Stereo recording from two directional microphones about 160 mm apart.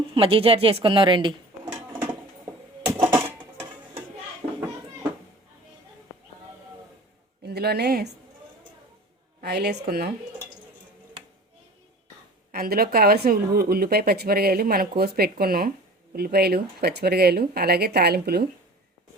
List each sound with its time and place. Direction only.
0.1 s a woman's voice: 35° right (ahead or behind)
3.1 s a sound: 15° right (ahead or behind)
7.4 s speech: 85° right
9.4 s a woman's voice: 90° right; by 10.1 s 75° right (ahead or behind)
12.5 s speech: 70° right (ahead or behind)